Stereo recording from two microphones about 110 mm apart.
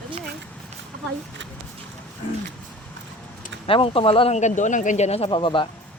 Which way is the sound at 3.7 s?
55° left (ahead or behind).